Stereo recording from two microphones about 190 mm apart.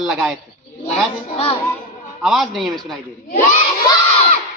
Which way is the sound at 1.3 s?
30° left (ahead or behind).